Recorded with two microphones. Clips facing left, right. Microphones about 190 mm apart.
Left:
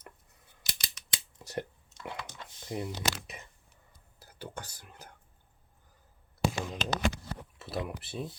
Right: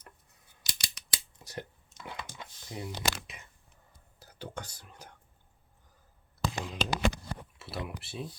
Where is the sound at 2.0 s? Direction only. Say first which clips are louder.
Left 2 dB; 5° right (ahead or behind).